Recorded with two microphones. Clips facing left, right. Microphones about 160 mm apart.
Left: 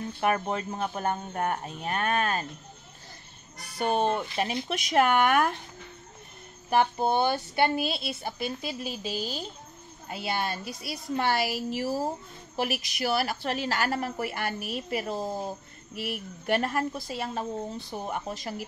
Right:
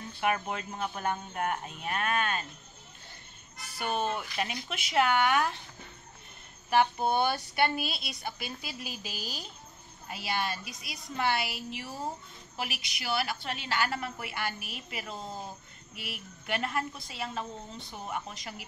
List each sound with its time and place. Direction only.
0.2 s a woman's voice: 35° left (ahead or behind)
3.7 s a woman's voice: 35° left (ahead or behind)
4.8 s speech: 45° left (ahead or behind)
6.7 s a woman's voice: 40° left (ahead or behind)
7.1 s a woman's voice: 25° left (ahead or behind)